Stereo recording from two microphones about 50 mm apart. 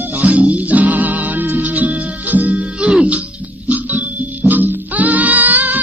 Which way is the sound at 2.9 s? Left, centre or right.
Centre.